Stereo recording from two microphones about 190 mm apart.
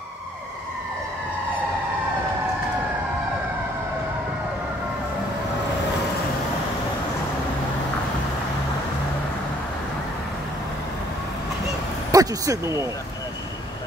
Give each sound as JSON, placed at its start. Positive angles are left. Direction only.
{"t": 12.1, "sound": "speech", "side_deg": -20}